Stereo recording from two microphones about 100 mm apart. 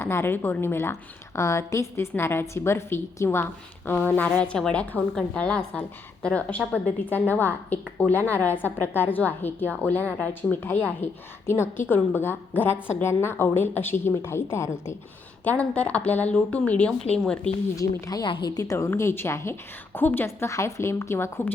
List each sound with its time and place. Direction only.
0.0 s a woman's voice: 25° left (ahead or behind)
4.4 s a woman's voice: 10° left (ahead or behind); by 14.9 s 25° left (ahead or behind)
15.4 s a woman's voice: 15° left (ahead or behind)
17.7 s speech: 40° left (ahead or behind)
18.3 s a woman's voice: 55° left (ahead or behind)
18.5 s a woman's voice: 35° left (ahead or behind)